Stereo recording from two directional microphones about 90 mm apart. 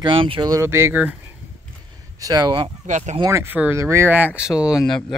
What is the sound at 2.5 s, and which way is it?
Speech, 70° right (ahead or behind).